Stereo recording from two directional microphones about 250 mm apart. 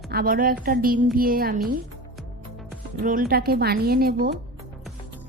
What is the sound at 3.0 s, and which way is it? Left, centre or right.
A woman's voice, right.